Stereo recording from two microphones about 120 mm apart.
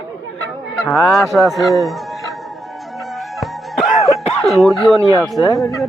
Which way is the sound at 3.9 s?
60° left (ahead or behind).